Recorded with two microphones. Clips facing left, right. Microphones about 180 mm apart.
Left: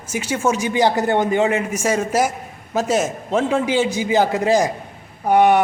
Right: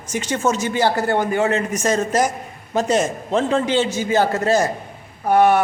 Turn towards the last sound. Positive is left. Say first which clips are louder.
# left 1 dB
turn(degrees=15)  # may be behind; listen again after turning